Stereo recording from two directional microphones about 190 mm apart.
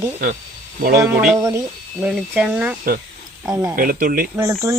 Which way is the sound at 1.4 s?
20° right (ahead or behind).